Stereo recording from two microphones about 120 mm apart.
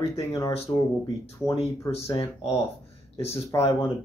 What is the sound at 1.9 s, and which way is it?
Speech, 50° left (ahead or behind).